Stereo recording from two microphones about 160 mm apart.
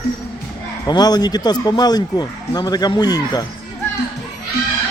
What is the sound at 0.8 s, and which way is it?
Speech, 25° left (ahead or behind).